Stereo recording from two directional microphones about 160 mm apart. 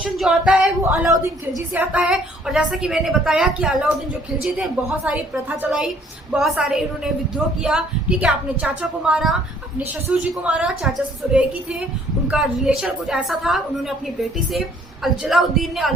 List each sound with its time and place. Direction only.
0.0 s a woman's voice: 5° right (ahead or behind)
15.0 s a woman's voice: centre (ahead or behind)